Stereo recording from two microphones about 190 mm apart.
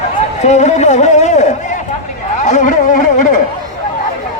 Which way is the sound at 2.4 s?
40° left (ahead or behind).